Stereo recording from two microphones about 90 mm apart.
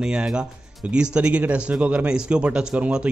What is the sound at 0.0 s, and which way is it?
A man's voice, 10° right (ahead or behind).